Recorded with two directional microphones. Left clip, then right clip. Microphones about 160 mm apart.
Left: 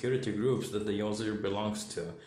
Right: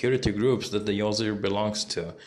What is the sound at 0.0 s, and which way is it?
Speech, 35° right (ahead or behind).